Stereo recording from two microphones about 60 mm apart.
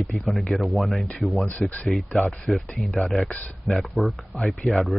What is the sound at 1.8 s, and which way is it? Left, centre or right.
Speech, centre.